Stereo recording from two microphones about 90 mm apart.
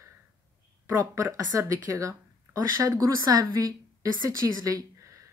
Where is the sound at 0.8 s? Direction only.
35° right (ahead or behind).